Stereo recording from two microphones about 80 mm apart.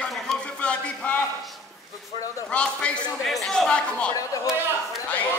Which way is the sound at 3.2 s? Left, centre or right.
Centre.